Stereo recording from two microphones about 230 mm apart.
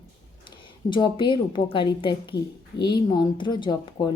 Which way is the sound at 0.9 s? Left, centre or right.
Centre.